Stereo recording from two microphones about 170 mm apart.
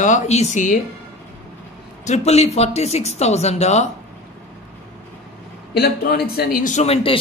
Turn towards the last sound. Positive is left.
turn(degrees=35)  # may be behind; listen again after turning